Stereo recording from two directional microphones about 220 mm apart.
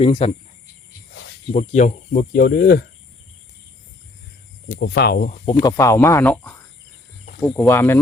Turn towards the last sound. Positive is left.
turn(degrees=10)  # may be behind; listen again after turning